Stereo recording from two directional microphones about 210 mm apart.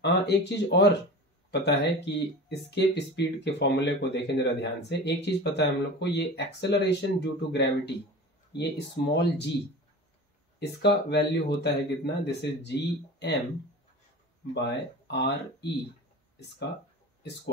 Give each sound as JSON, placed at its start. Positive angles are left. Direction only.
{"t": 0.0, "sound": "speech", "side_deg": 55}
{"t": 10.6, "sound": "speech", "side_deg": 55}
{"t": 14.5, "sound": "speech", "side_deg": 55}